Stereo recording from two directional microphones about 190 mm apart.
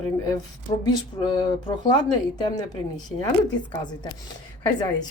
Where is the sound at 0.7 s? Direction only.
30° left (ahead or behind).